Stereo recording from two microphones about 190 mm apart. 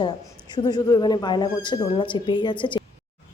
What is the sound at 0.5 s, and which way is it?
A woman's voice, 20° left (ahead or behind).